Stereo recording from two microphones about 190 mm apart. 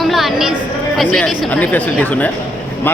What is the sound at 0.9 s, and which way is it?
A man's voice, 5° left (ahead or behind).